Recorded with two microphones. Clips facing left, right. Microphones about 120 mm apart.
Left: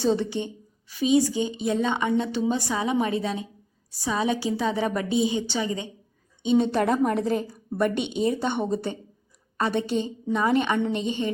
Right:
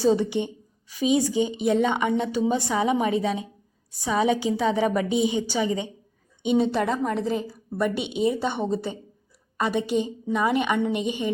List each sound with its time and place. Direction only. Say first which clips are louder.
0.1 s a woman's voice: right 2 dB; 15° right (ahead or behind)
6.6 s a woman's voice: left 2 dB; centre (ahead or behind)